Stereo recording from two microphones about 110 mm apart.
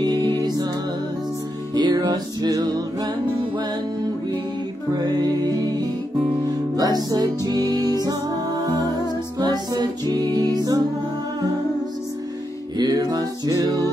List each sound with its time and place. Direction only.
0.0 s music: 40° right (ahead or behind)
1.7 s music: 40° right (ahead or behind)
4.9 s music: 35° right (ahead or behind)
12.7 s music: 40° right (ahead or behind)